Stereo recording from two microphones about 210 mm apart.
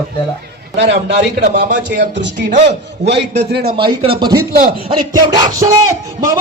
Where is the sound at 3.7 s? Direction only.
25° right (ahead or behind).